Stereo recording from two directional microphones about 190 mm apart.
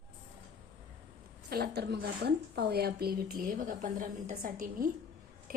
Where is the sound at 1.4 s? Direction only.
55° right (ahead or behind).